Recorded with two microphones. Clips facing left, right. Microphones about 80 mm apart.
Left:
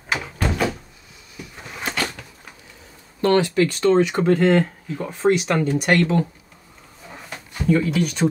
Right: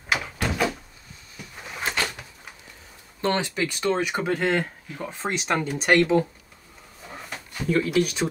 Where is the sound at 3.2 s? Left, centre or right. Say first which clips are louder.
Left 7 dB; right.